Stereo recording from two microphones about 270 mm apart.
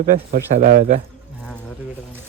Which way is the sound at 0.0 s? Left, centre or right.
Right.